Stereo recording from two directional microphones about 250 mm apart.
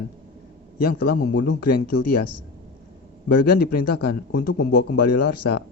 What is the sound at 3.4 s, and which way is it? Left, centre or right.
Speech, left.